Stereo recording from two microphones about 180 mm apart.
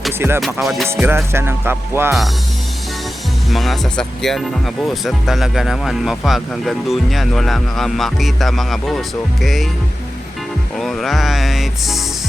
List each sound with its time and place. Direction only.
0.3 s speech: centre (ahead or behind)
0.9 s music: 15° right (ahead or behind)
3.5 s speech: centre (ahead or behind)
10.8 s speech: centre (ahead or behind)